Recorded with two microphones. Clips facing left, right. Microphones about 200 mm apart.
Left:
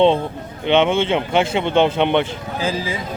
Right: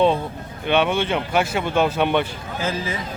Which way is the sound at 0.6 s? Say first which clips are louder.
Left 4 dB; 20° left (ahead or behind).